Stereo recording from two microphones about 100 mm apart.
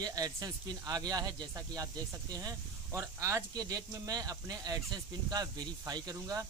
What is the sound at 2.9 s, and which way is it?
Speech, 30° right (ahead or behind).